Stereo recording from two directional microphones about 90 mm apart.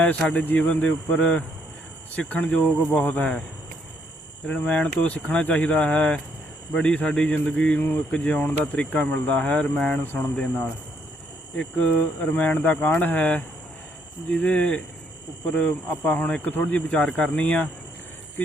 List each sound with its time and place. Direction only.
0.2 s speech: 15° left (ahead or behind)
4.4 s speech: 15° left (ahead or behind)